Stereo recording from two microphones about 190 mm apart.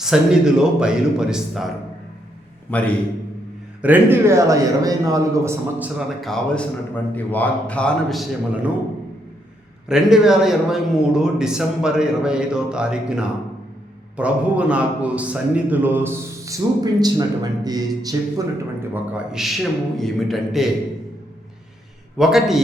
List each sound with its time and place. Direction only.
0.0 s a man's voice: 5° right (ahead or behind)
3.8 s a man's voice: 10° right (ahead or behind)
6.1 s a man's voice: centre (ahead or behind)
9.9 s a man's voice: 5° right (ahead or behind)
19.1 s a man's voice: centre (ahead or behind)
22.2 s a man's voice: centre (ahead or behind)